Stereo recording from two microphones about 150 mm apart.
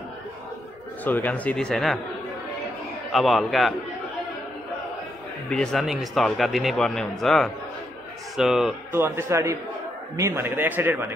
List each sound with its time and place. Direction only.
1.0 s speech: 10° left (ahead or behind)
3.1 s speech: centre (ahead or behind)
5.5 s speech: 5° left (ahead or behind)
8.9 s a man's voice: 15° right (ahead or behind)